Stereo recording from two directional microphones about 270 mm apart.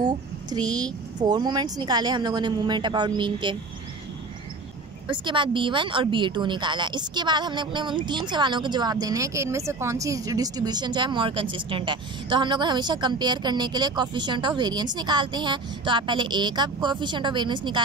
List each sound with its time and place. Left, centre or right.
0.0 s a child's voice: centre
5.1 s speech: centre